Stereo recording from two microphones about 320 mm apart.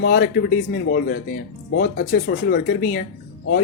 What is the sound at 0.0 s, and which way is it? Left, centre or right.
Speech, left.